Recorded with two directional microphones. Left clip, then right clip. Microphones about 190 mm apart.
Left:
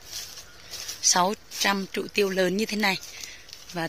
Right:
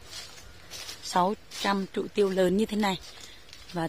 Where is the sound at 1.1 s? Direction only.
5° right (ahead or behind).